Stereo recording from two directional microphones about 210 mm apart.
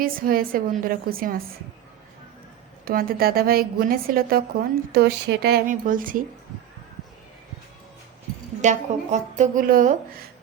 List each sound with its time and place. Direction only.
0.0 s a woman's voice: 45° right (ahead or behind)
2.8 s a woman's voice: 45° right (ahead or behind)
8.6 s a woman's voice: 35° right (ahead or behind)